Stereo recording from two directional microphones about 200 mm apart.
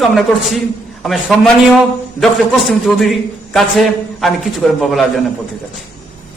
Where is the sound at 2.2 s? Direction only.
Centre (ahead or behind).